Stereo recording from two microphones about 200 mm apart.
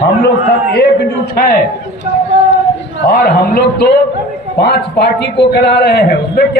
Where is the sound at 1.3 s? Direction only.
50° left (ahead or behind).